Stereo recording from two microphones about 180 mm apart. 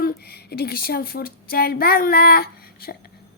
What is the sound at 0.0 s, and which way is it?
A woman's voice, 60° left (ahead or behind).